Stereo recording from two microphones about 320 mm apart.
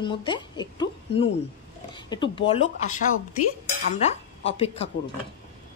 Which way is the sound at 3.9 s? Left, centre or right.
Centre.